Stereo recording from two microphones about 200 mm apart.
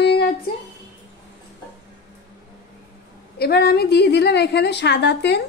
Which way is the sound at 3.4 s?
55° left (ahead or behind).